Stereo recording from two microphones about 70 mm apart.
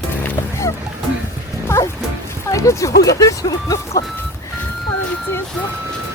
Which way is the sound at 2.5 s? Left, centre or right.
Left.